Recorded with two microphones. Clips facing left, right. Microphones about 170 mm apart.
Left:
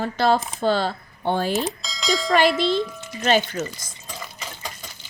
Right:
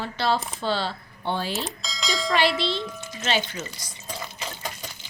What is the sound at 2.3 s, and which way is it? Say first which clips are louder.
Speech: left 5 dB; 45° left (ahead or behind).